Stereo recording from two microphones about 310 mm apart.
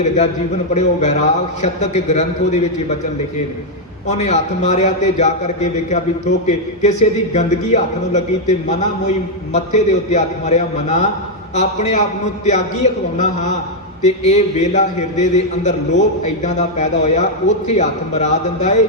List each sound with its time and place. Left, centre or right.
0.7 s a man's voice: left
4.0 s a man's voice: left